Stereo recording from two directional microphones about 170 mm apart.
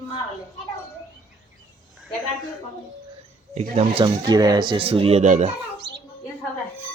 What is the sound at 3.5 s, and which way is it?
Speech, 35° right (ahead or behind).